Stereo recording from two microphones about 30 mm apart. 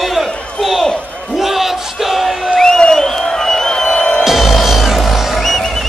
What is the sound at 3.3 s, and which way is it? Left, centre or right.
Music, centre.